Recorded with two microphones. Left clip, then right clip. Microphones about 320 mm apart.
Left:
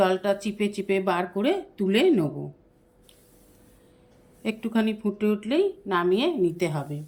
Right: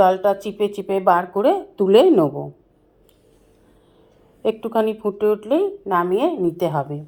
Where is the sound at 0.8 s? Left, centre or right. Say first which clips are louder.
Right 8 dB; right.